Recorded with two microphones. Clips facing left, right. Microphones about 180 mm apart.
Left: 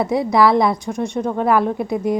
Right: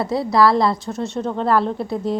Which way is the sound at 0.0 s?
20° left (ahead or behind).